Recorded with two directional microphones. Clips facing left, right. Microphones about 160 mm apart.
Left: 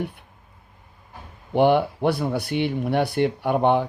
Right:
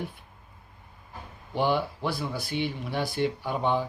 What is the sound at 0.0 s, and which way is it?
Speech, 65° left (ahead or behind).